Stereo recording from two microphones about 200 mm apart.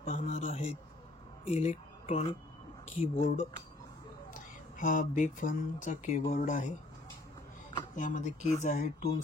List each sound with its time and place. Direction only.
0.0 s a sound: 40° left (ahead or behind)
1.4 s speech: 35° left (ahead or behind)
7.9 s speech: 40° left (ahead or behind)